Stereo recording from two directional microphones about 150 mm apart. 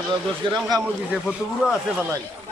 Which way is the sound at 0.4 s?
35° right (ahead or behind).